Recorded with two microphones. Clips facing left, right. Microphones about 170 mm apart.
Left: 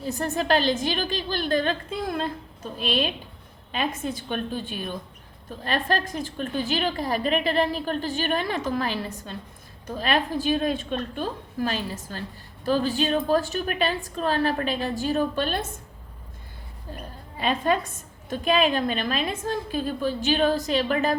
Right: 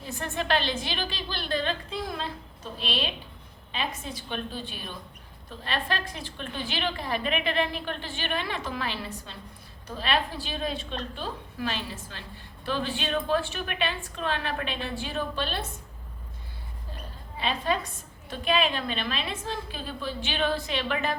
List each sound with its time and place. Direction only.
0.0 s a woman's voice: 40° left (ahead or behind)
17.3 s a woman's voice: 50° left (ahead or behind)